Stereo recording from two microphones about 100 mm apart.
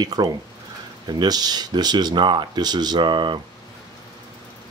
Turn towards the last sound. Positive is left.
turn(degrees=-50)  # may be behind; listen again after turning